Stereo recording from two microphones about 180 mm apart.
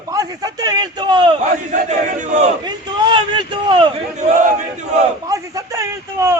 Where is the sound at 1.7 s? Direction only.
40° right (ahead or behind).